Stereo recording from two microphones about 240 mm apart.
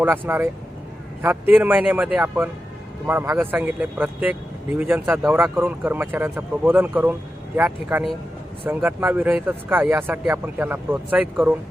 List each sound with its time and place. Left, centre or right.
0.0 s speech: centre